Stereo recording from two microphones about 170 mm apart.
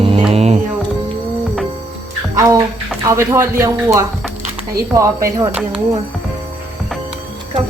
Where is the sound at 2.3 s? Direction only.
20° right (ahead or behind).